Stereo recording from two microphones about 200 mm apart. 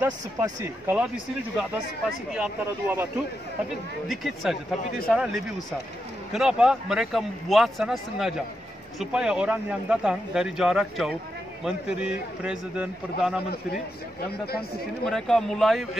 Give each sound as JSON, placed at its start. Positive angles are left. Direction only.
{"t": 0.0, "sound": "speech", "side_deg": -10}
{"t": 2.3, "sound": "speech", "side_deg": -10}
{"t": 4.1, "sound": "speech", "side_deg": 0}
{"t": 15.0, "sound": "speech", "side_deg": 0}